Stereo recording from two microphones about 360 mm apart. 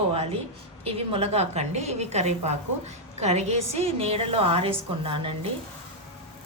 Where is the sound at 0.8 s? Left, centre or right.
Centre.